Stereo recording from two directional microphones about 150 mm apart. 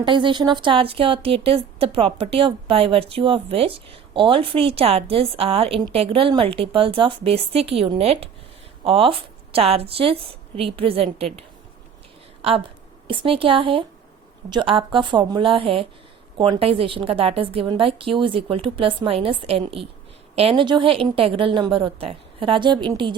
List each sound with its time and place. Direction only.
0.0 s a woman's voice: 30° right (ahead or behind)
12.4 s a woman's voice: 40° right (ahead or behind)